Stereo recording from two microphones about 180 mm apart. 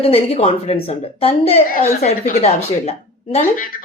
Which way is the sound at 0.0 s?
35° left (ahead or behind).